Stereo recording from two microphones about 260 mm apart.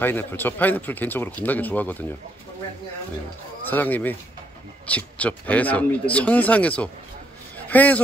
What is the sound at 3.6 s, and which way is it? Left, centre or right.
A man's voice, centre.